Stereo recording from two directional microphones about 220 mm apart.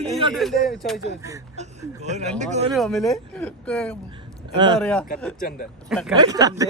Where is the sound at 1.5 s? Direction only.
30° right (ahead or behind).